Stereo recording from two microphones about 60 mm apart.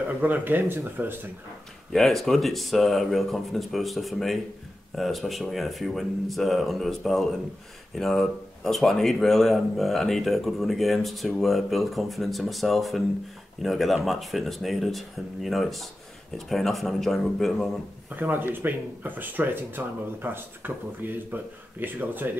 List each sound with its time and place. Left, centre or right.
0.2 s speech: right
1.9 s speech: centre
18.2 s speech: right